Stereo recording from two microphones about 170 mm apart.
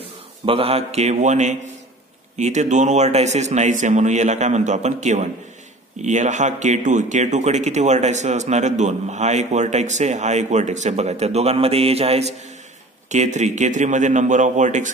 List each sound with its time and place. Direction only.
0.5 s a man's voice: 35° right (ahead or behind)